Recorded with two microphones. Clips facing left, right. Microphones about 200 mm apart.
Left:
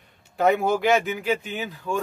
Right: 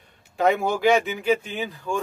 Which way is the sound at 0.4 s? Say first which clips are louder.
Even; centre (ahead or behind).